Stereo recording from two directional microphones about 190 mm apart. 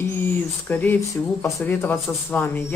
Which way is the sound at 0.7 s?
10° left (ahead or behind).